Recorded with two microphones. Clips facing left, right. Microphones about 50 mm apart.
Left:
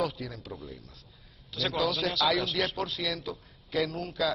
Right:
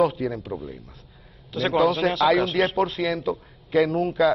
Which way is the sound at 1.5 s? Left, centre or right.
Right.